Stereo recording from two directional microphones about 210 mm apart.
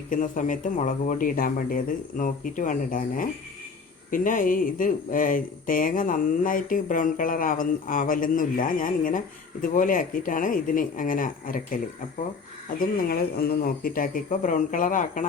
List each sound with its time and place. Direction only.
0.1 s speech: 40° left (ahead or behind)
12.8 s speech: 45° left (ahead or behind)